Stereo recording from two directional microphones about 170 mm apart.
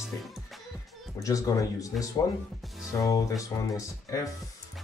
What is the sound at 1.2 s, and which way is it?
Speech, 20° left (ahead or behind).